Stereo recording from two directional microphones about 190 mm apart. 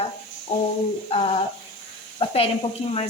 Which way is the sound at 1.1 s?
35° left (ahead or behind).